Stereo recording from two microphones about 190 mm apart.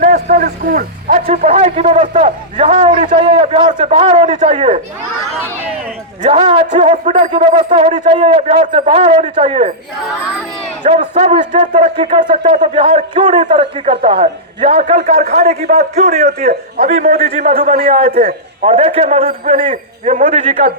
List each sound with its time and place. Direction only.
0.0 s a sound: 40° right (ahead or behind)
0.4 s a man's voice: 50° right (ahead or behind)
3.0 s a man's voice: 30° right (ahead or behind)
6.2 s a man's voice: 30° right (ahead or behind)
6.9 s a man's voice: 40° right (ahead or behind)
10.8 s a man's voice: 30° right (ahead or behind)
15.6 s a man's voice: 50° right (ahead or behind)
16.0 s a man's voice: 35° right (ahead or behind)
17.6 s a man's voice: 50° right (ahead or behind)
17.8 s a man's voice: 30° right (ahead or behind)
19.7 s a man's voice: 45° right (ahead or behind)